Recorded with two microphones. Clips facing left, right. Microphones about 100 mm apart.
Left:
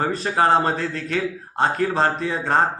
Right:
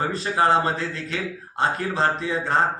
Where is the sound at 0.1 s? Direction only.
45° left (ahead or behind).